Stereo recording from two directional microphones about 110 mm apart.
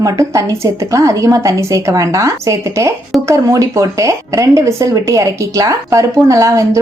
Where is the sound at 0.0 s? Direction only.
30° right (ahead or behind).